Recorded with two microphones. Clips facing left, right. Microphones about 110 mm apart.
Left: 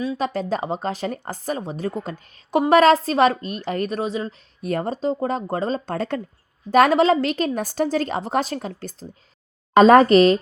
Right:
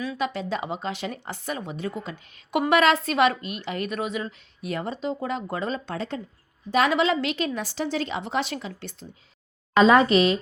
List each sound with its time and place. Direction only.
0.2 s a woman's voice: 40° left (ahead or behind)